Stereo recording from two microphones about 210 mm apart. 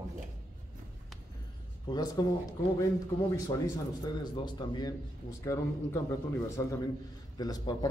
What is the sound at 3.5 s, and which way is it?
A man's voice, 20° left (ahead or behind).